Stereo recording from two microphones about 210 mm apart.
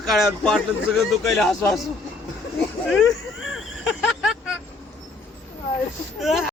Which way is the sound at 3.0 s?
70° left (ahead or behind).